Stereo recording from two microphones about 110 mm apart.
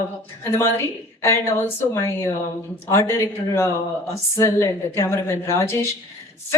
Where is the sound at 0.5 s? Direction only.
25° left (ahead or behind).